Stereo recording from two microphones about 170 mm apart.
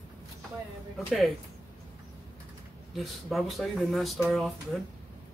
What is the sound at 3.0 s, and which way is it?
Speech, centre (ahead or behind).